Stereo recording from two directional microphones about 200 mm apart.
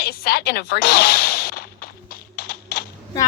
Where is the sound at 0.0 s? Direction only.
50° left (ahead or behind).